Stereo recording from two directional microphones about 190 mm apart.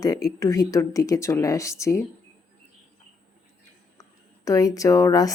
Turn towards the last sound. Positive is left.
turn(degrees=15)  # may be behind; listen again after turning